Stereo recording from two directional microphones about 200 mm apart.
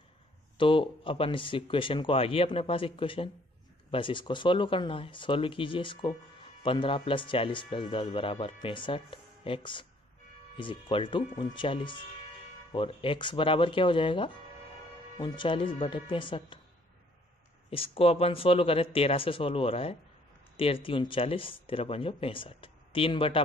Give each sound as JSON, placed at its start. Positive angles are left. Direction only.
{"t": 0.6, "sound": "speech", "side_deg": 25}
{"t": 17.6, "sound": "speech", "side_deg": 30}